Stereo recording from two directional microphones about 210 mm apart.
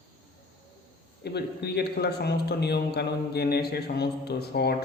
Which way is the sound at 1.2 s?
50° left (ahead or behind).